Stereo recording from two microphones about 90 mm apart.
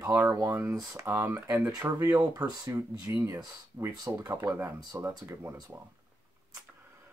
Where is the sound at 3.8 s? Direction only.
25° right (ahead or behind).